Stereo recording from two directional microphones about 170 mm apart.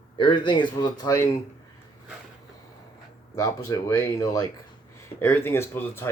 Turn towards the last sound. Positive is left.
turn(degrees=15)  # may be behind; listen again after turning